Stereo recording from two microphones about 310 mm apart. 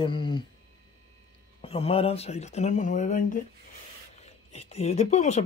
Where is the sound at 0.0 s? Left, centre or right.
Centre.